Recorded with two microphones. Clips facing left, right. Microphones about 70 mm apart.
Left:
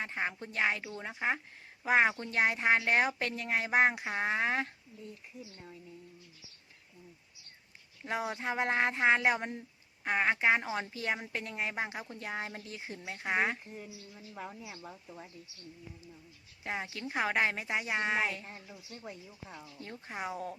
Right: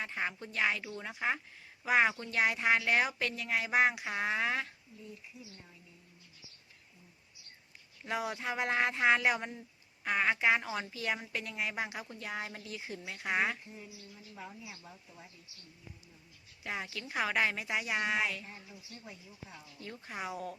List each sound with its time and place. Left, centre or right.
0.0 s speech: left
8.0 s speech: left
14.3 s speech: left
16.6 s speech: left
19.8 s speech: left